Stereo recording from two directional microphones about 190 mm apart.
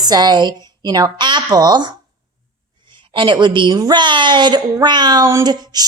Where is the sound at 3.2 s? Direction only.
25° right (ahead or behind).